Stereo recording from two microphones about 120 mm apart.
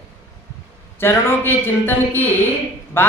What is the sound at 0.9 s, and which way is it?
A man's voice, 20° left (ahead or behind).